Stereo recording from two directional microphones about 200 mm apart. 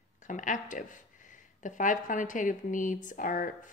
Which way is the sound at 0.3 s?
40° left (ahead or behind).